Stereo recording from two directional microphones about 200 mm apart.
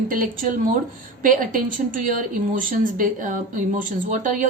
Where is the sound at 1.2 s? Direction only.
45° right (ahead or behind).